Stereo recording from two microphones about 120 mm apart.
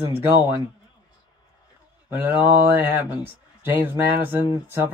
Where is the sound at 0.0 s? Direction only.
20° right (ahead or behind).